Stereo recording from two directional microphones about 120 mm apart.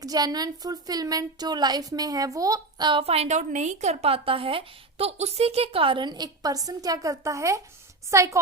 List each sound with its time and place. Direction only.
0.0 s a woman's voice: 30° right (ahead or behind)
3.0 s a woman's voice: 60° right (ahead or behind); by 8.4 s 25° right (ahead or behind)